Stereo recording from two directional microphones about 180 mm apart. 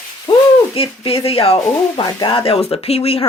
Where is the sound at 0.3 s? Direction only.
30° left (ahead or behind).